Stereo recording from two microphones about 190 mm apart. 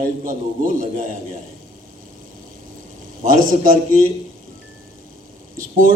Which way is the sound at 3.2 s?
45° right (ahead or behind).